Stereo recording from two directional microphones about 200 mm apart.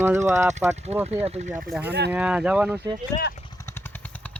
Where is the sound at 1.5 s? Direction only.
10° right (ahead or behind).